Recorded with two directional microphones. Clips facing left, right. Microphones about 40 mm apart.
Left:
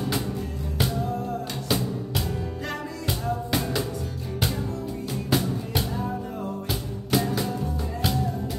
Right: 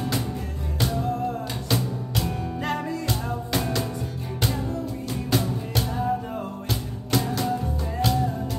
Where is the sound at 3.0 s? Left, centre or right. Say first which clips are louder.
Left 1 dB; centre.